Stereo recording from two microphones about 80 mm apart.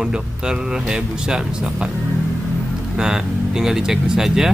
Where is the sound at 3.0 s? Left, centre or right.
Centre.